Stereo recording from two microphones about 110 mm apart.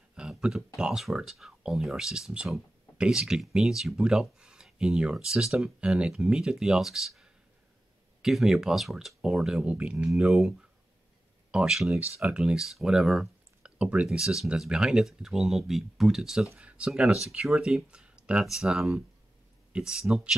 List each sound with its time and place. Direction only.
0.1 s speech: 5° right (ahead or behind)
11.5 s speech: 5° right (ahead or behind)